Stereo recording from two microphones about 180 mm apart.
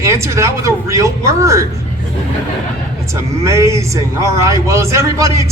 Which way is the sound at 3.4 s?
15° right (ahead or behind).